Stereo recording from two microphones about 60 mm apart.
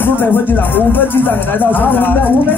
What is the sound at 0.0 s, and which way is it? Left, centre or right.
Speech, left.